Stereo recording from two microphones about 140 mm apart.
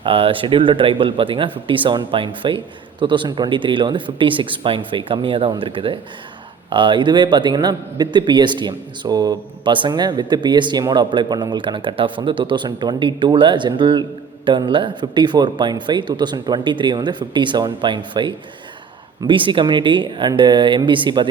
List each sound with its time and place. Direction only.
0.0 s a man's voice: 40° right (ahead or behind)